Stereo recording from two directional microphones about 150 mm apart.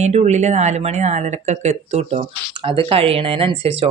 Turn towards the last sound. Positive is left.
turn(degrees=-40)  # may be behind; listen again after turning